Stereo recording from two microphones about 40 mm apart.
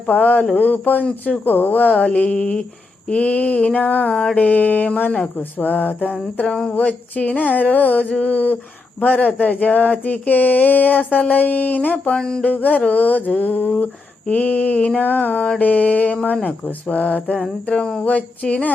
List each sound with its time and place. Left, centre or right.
0.0 s a sound: left
2.0 s mantra: left
3.1 s speech: left
4.1 s mantra: centre
4.4 s a sound: left
6.5 s mantra: centre
6.7 s speech: left
9.0 s a sound: left
12.1 s mantra: centre
12.4 s speech: left
12.9 s a sound: left
14.3 s speech: left
15.0 s speech: left